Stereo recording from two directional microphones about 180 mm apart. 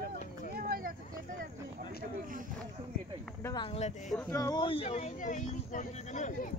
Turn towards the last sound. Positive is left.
turn(degrees=45)  # may be behind; listen again after turning